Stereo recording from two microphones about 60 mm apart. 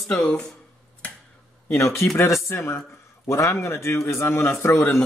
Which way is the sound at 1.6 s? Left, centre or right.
Left.